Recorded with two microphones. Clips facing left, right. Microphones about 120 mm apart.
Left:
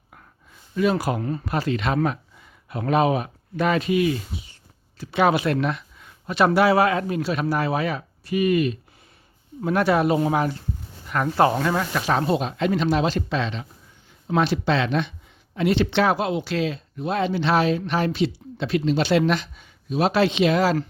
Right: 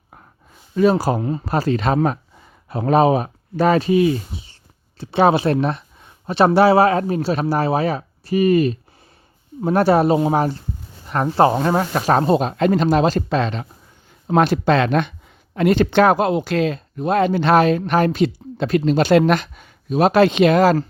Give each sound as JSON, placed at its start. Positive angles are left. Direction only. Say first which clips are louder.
{"t": 0.8, "sound": "speech", "louder": "right 6 dB", "side_deg": -35}
{"t": 1.2, "sound": "speech", "louder": "right 4 dB", "side_deg": -20}
{"t": 1.5, "sound": "speech", "louder": "right 5 dB", "side_deg": -40}